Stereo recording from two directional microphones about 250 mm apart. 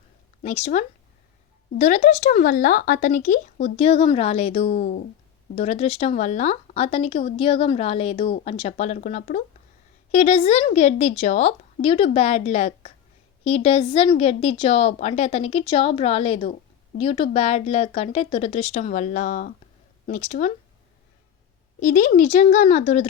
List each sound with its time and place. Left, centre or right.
0.4 s speech: left
21.8 s speech: left